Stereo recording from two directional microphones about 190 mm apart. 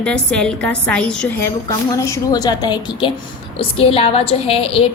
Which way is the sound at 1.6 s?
15° left (ahead or behind).